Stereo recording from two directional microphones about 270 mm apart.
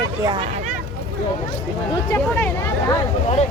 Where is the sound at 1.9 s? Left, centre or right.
Centre.